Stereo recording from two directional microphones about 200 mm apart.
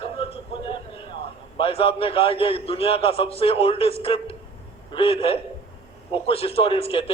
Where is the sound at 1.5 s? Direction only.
25° left (ahead or behind).